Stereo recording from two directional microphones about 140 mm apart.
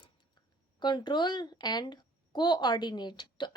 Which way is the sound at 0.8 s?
35° left (ahead or behind).